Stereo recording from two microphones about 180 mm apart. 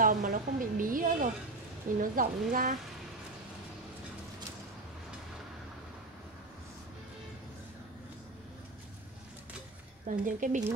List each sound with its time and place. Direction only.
0.0 s a woman's voice: 50° right (ahead or behind)
10.0 s a woman's voice: 45° right (ahead or behind)